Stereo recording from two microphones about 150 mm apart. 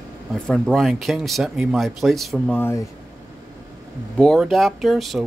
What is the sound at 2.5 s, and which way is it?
Speech, 15° left (ahead or behind).